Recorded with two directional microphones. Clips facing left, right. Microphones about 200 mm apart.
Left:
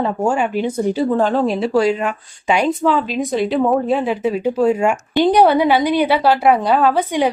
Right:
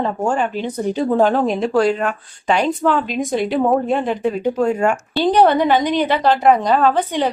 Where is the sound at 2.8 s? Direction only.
Centre (ahead or behind).